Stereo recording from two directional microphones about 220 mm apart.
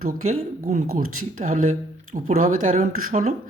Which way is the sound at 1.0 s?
75° right (ahead or behind).